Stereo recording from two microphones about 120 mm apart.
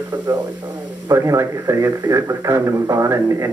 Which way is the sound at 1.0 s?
30° right (ahead or behind).